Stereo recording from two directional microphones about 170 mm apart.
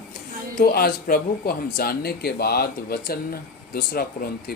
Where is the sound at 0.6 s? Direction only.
65° left (ahead or behind).